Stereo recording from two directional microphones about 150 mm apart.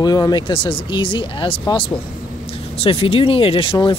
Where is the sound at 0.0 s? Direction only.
25° left (ahead or behind).